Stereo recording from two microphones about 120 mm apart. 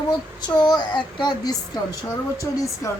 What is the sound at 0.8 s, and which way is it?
Speech, 40° left (ahead or behind).